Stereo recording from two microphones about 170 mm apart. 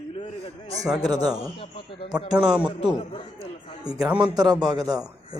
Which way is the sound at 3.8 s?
20° right (ahead or behind).